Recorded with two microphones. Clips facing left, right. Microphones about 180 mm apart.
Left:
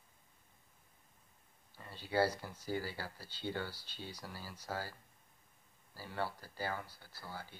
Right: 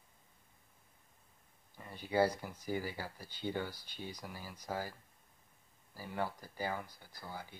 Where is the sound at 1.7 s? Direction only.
15° right (ahead or behind).